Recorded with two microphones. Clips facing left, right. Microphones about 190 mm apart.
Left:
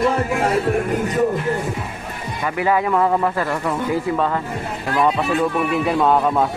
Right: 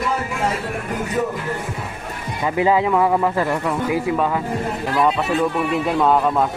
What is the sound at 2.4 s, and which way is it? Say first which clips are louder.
Speech: right 2 dB; 20° right (ahead or behind).